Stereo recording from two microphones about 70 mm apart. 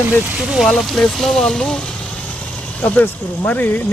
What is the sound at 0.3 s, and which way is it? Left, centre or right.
Speech, centre.